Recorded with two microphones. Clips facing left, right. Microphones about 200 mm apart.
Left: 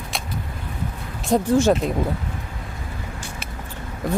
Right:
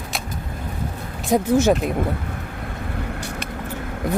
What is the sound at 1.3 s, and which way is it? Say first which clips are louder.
Speech: right 1 dB; centre (ahead or behind).